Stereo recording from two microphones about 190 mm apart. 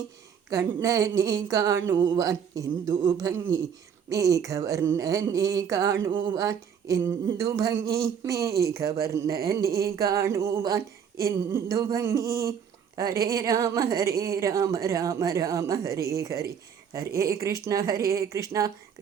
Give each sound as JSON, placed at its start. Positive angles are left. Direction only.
{"t": 0.5, "sound": "speech", "side_deg": -15}